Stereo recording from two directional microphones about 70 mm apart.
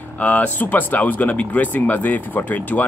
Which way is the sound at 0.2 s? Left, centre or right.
Left.